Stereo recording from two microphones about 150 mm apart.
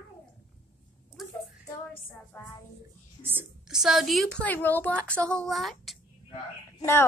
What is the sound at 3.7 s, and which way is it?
Speech, centre (ahead or behind).